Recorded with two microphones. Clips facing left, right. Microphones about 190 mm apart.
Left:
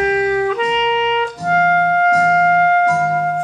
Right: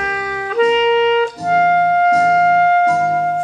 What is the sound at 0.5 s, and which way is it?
Music, 40° right (ahead or behind).